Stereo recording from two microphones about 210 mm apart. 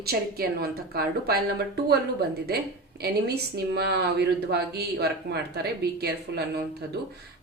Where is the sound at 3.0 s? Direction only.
50° right (ahead or behind).